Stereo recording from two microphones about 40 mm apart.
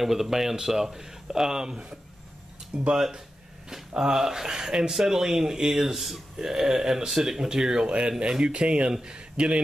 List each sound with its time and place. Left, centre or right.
0.0 s speech: centre
3.9 s speech: centre